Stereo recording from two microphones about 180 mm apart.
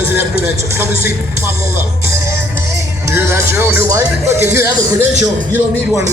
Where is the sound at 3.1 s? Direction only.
15° right (ahead or behind).